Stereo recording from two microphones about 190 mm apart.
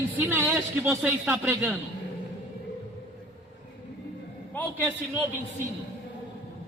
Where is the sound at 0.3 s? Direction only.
10° right (ahead or behind).